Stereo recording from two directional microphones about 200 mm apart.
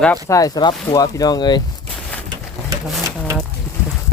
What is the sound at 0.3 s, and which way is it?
Speech, 15° left (ahead or behind).